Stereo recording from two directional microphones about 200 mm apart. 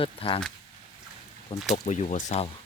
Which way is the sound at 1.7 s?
35° left (ahead or behind).